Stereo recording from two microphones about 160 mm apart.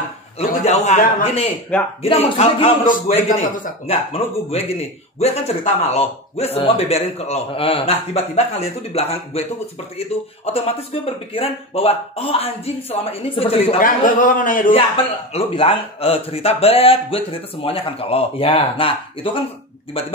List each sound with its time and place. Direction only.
0.4 s a man's voice: 45° left (ahead or behind)
1.7 s speech: 5° left (ahead or behind)
2.0 s a man's voice: 40° left (ahead or behind)
3.8 s a man's voice: 40° left (ahead or behind)
13.7 s a man's voice: 60° left (ahead or behind)
15.3 s a man's voice: 40° left (ahead or behind)